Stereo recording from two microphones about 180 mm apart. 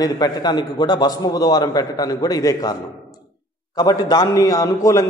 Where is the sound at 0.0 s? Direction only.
25° left (ahead or behind).